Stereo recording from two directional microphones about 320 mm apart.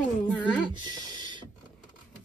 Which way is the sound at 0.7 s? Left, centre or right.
Centre.